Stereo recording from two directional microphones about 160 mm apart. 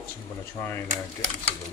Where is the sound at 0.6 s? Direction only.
15° left (ahead or behind).